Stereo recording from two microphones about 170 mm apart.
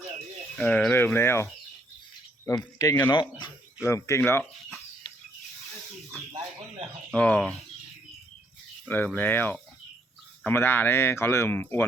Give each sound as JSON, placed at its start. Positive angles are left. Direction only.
{"t": 0.5, "sound": "speech", "side_deg": 5}
{"t": 2.5, "sound": "speech", "side_deg": 20}
{"t": 3.8, "sound": "speech", "side_deg": 15}
{"t": 6.3, "sound": "bird", "side_deg": -35}
{"t": 7.1, "sound": "speech", "side_deg": 5}
{"t": 8.9, "sound": "speech", "side_deg": 10}